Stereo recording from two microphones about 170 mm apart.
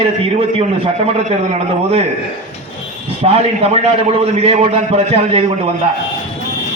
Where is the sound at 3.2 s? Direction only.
35° right (ahead or behind).